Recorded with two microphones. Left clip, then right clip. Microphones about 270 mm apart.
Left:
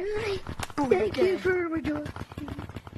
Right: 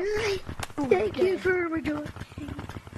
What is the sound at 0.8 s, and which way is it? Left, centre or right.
Speech, centre.